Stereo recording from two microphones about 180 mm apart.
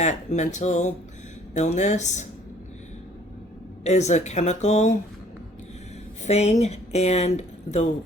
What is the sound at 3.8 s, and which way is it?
Speech, 40° left (ahead or behind).